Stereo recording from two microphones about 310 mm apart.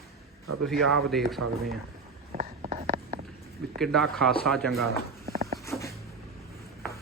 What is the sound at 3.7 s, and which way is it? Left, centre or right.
Speech, centre.